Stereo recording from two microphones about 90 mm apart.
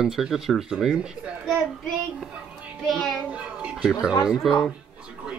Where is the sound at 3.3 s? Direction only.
15° right (ahead or behind).